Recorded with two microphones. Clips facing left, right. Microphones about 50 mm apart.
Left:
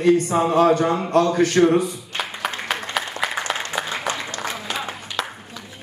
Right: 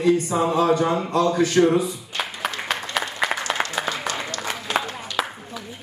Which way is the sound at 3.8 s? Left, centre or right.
Left.